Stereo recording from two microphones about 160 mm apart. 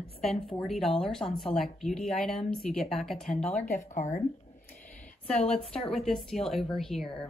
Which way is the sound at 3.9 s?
50° left (ahead or behind).